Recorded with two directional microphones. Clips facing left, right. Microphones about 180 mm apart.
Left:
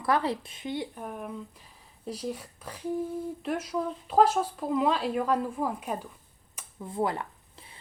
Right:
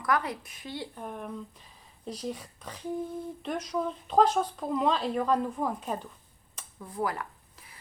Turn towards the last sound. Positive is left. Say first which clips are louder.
# left 1 dB
turn(degrees=25)  # may be behind; listen again after turning